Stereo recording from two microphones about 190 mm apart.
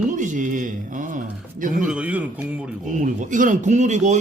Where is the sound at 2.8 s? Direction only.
40° right (ahead or behind).